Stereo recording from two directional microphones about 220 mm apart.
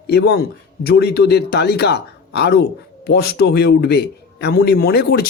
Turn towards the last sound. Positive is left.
turn(degrees=45)  # may be behind; listen again after turning